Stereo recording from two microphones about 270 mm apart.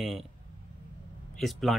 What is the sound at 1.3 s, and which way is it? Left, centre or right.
Speech, centre.